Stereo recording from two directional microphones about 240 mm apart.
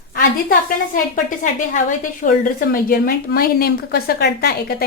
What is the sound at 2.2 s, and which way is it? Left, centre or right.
A woman's voice, left.